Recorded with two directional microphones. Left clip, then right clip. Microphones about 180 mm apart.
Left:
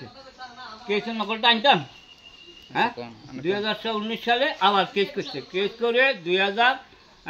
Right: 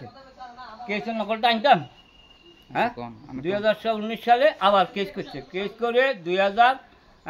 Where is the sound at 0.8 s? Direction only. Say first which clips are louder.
Left 1 dB; 20° right (ahead or behind).